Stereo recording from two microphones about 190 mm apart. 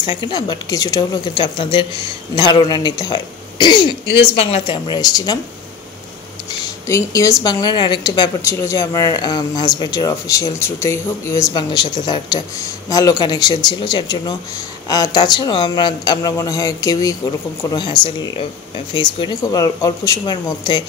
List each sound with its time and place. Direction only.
0.0 s speech: 25° left (ahead or behind)
4.0 s speech: 60° left (ahead or behind)
4.3 s speech: 35° left (ahead or behind)
6.9 s speech: 15° left (ahead or behind)
18.9 s speech: 25° left (ahead or behind)